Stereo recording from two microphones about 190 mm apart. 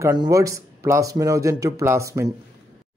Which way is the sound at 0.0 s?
20° right (ahead or behind).